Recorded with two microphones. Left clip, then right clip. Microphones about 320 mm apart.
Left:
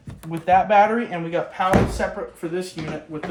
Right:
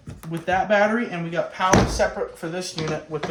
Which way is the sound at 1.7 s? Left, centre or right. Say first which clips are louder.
Right 3 dB; right.